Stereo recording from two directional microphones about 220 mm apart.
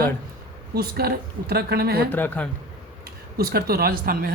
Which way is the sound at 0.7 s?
45° right (ahead or behind).